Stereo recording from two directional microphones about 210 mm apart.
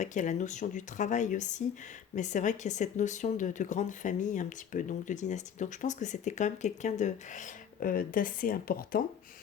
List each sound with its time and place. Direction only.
0.0 s speech: 35° left (ahead or behind)